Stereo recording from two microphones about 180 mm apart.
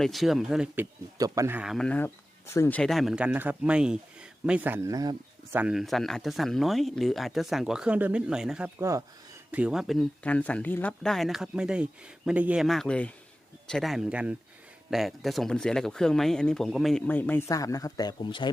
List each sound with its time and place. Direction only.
0.0 s speech: centre (ahead or behind)
1.2 s a man's voice: 20° right (ahead or behind)
1.5 s speech: centre (ahead or behind)
8.8 s speech: 20° right (ahead or behind)
9.5 s speech: 5° right (ahead or behind); by 18.5 s 25° left (ahead or behind)